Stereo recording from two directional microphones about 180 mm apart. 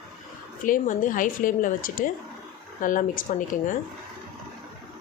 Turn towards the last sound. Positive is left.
turn(degrees=45)  # may be behind; listen again after turning